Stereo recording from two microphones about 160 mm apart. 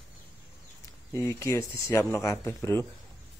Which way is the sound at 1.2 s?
15° left (ahead or behind).